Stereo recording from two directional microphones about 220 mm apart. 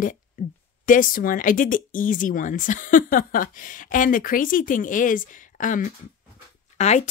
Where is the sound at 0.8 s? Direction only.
40° left (ahead or behind).